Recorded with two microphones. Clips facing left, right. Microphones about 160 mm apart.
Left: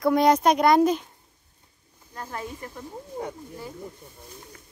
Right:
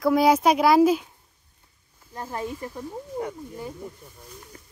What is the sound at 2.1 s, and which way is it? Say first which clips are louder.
Speech: right 4 dB; 20° right (ahead or behind).